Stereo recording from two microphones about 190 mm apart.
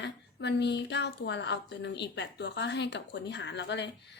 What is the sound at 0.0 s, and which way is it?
A woman's voice, 65° left (ahead or behind).